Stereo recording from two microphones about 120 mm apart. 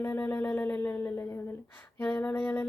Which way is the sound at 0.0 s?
15° left (ahead or behind).